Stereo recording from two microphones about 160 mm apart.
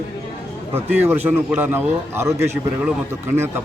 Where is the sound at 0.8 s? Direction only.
10° right (ahead or behind).